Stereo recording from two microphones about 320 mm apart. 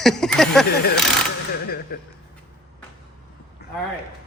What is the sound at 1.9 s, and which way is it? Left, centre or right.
Speech, left.